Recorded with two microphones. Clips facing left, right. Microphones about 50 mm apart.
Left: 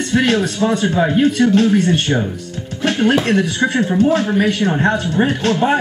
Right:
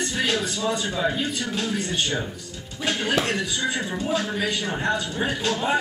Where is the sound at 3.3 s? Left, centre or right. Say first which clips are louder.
Left 9 dB; left.